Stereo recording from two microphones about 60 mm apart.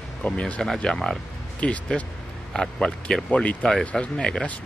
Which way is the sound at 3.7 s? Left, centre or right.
Centre.